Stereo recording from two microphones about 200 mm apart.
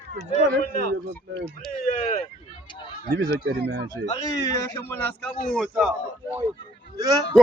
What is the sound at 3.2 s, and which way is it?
Speech, 60° right (ahead or behind).